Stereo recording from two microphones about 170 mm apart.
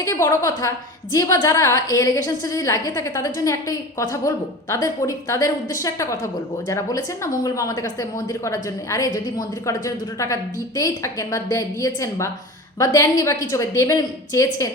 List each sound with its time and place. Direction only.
0.0 s a woman's voice: 15° left (ahead or behind)